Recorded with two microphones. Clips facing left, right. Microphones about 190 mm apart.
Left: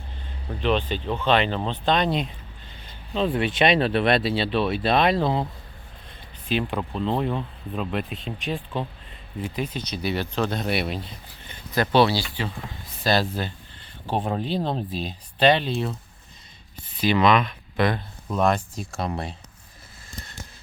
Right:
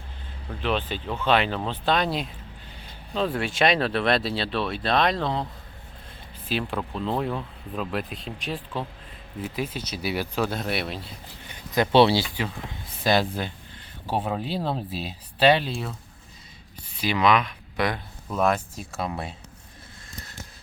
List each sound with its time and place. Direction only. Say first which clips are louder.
0.6 s speech: left 3 dB; 5° right (ahead or behind)
6.5 s speech: left 3 dB; centre (ahead or behind)
11.4 s speech: right 1 dB; 15° right (ahead or behind)
17.0 s speech: left 2 dB; 10° right (ahead or behind)